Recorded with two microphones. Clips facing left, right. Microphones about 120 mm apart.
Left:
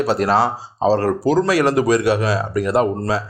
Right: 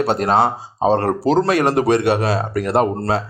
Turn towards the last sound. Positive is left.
turn(degrees=-55)  # may be behind; listen again after turning